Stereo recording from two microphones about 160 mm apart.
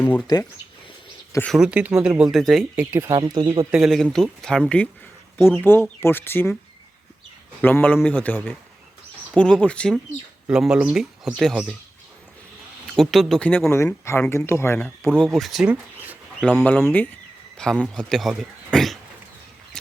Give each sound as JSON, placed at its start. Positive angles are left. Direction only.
{"t": 0.3, "sound": "speech", "side_deg": 25}
{"t": 1.5, "sound": "speech", "side_deg": -5}
{"t": 2.9, "sound": "speech", "side_deg": -20}
{"t": 3.7, "sound": "speech", "side_deg": 0}
{"t": 5.6, "sound": "speech", "side_deg": 15}
{"t": 7.6, "sound": "speech", "side_deg": 10}
{"t": 10.4, "sound": "speech", "side_deg": -5}
{"t": 13.0, "sound": "speech", "side_deg": 0}
{"t": 15.2, "sound": "speech", "side_deg": 0}
{"t": 16.6, "sound": "speech", "side_deg": 10}
{"t": 19.8, "sound": "a sound", "side_deg": 5}